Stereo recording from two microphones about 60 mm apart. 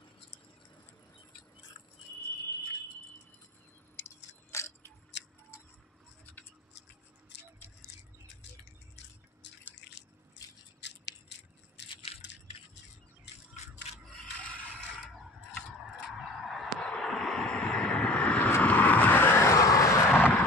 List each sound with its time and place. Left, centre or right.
4.5 s biting: left
14.1 s mechanisms: left
16.1 s honk: centre
16.8 s a sound: centre
17.1 s vehicle: centre; by 19.1 s left
19.1 s vehicle: left
19.4 s vehicle: left
20.1 s vehicle: left